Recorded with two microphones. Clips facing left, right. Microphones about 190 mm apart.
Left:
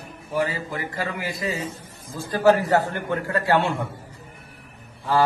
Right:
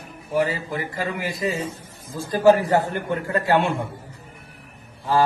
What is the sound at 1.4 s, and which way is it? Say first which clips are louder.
A man's voice: right 4 dB; 10° right (ahead or behind).